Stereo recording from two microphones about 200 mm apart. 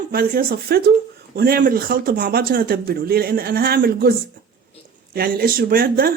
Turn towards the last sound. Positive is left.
turn(degrees=-45)  # may be behind; listen again after turning